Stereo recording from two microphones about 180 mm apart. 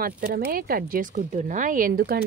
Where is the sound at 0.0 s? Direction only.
55° right (ahead or behind).